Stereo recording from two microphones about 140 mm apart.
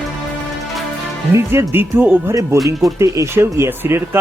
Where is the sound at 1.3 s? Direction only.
20° right (ahead or behind).